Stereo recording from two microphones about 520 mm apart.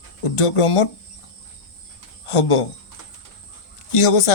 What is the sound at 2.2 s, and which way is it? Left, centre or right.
Speech, left.